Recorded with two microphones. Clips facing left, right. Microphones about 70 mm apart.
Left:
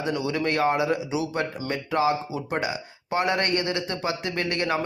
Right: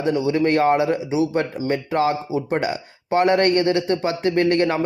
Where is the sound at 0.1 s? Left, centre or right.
Right.